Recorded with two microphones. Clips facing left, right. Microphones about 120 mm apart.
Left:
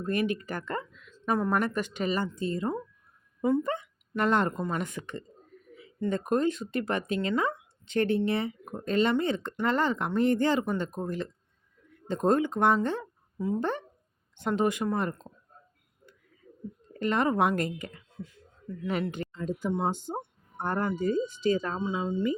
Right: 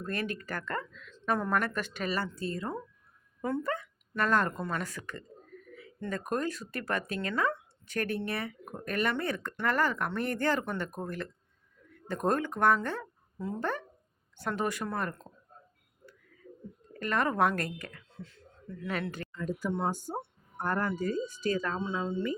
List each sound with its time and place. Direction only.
0.0 s speech: 15° left (ahead or behind)
17.0 s speech: 20° left (ahead or behind)